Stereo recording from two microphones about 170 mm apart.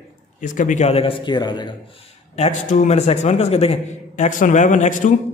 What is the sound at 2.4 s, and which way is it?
A man's voice, 45° left (ahead or behind).